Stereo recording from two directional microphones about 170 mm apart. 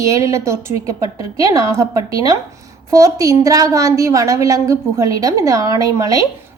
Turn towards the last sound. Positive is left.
turn(degrees=-20)  # may be behind; listen again after turning